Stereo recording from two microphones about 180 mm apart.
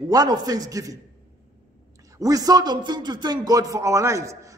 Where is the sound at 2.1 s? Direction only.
20° right (ahead or behind).